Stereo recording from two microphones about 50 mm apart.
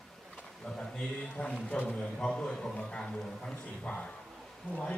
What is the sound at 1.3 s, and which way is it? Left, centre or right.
A man's voice, left.